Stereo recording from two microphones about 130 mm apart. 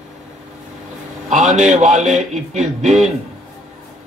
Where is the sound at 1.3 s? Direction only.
65° right (ahead or behind).